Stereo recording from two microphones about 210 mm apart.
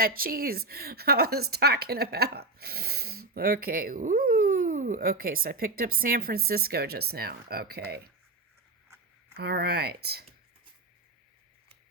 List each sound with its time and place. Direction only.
0.0 s a woman's voice: 45° right (ahead or behind)
9.3 s a woman's voice: 50° right (ahead or behind)